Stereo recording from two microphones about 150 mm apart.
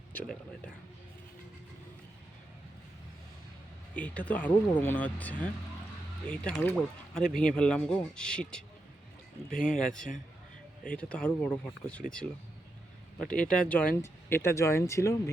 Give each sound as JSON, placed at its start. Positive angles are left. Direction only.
{"t": 0.1, "sound": "speech", "side_deg": 10}
{"t": 3.9, "sound": "speech", "side_deg": 10}
{"t": 9.5, "sound": "speech", "side_deg": 60}
{"t": 9.8, "sound": "speech", "side_deg": 5}
{"t": 13.3, "sound": "speech", "side_deg": 5}